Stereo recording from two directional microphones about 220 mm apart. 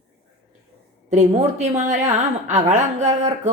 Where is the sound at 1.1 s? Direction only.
30° right (ahead or behind).